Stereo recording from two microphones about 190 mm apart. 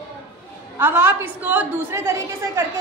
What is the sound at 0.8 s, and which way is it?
A woman's voice, 10° right (ahead or behind).